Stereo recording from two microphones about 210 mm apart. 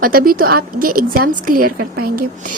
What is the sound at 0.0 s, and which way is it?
A woman's voice, 45° right (ahead or behind).